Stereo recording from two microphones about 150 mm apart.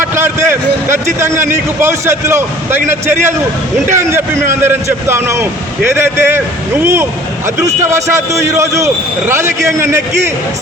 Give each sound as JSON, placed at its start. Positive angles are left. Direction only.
{"t": 0.0, "sound": "a man's voice", "side_deg": -15}
{"t": 3.9, "sound": "a man's voice", "side_deg": -15}